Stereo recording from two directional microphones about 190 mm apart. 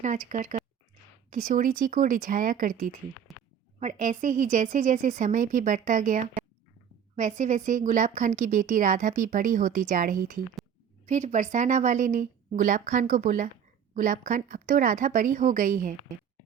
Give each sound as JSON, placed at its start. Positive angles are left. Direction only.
{"t": 0.0, "sound": "a woman's voice", "side_deg": -40}